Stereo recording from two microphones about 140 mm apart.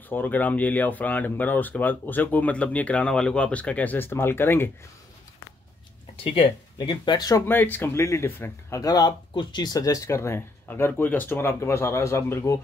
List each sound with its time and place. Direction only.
0.1 s speech: 15° left (ahead or behind)
6.2 s speech: 40° left (ahead or behind)
7.4 s speech: 15° left (ahead or behind)